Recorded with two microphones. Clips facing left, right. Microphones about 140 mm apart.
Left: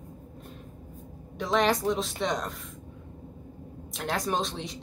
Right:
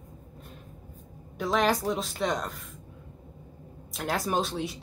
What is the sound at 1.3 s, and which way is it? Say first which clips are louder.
Speech: even; centre (ahead or behind).